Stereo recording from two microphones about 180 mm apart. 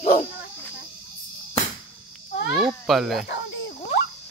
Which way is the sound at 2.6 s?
5° right (ahead or behind).